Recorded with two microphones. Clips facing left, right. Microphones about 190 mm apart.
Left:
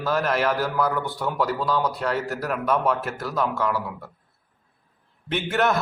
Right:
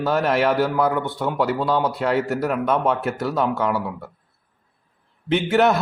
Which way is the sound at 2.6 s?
25° right (ahead or behind).